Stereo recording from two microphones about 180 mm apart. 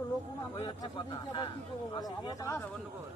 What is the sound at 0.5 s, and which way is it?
Speech, 25° left (ahead or behind).